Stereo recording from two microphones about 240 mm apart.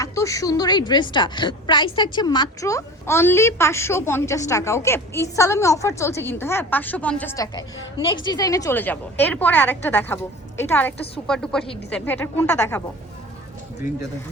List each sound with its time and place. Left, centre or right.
0.0 s a woman's voice: centre